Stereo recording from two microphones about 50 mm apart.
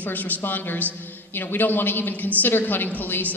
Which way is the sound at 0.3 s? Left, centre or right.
Left.